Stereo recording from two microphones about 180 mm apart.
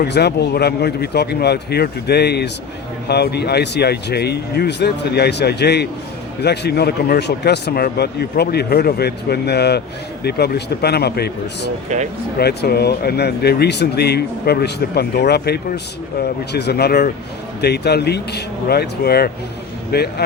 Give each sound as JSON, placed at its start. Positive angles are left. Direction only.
{"t": 0.0, "sound": "speech", "side_deg": 65}
{"t": 12.4, "sound": "speech", "side_deg": 65}